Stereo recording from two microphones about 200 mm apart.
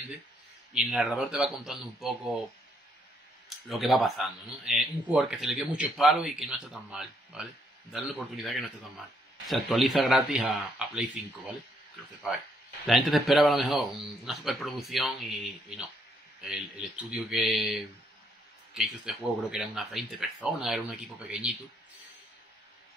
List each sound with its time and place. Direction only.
0.7 s speech: 5° right (ahead or behind)
3.4 s speech: centre (ahead or behind)
12.8 s speech: centre (ahead or behind)
19.0 s speech: 5° right (ahead or behind)